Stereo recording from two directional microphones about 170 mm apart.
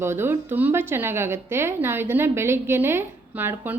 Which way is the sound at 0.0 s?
15° right (ahead or behind).